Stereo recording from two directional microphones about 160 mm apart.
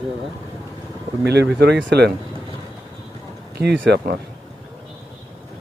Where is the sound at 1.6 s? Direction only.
90° right.